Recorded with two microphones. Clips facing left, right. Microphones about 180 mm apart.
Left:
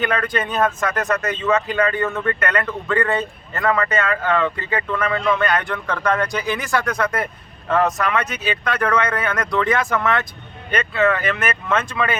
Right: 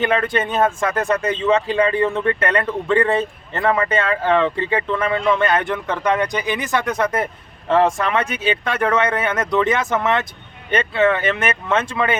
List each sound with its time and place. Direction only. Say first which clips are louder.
0.0 s speech: right 3 dB; 25° right (ahead or behind)